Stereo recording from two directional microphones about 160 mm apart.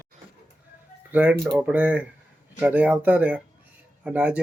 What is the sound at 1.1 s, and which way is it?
Speech, 10° right (ahead or behind).